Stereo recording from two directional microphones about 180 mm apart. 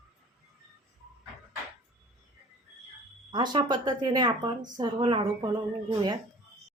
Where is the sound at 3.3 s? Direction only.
25° right (ahead or behind).